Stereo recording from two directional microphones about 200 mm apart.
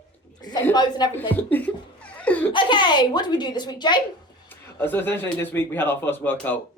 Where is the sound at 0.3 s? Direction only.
20° left (ahead or behind).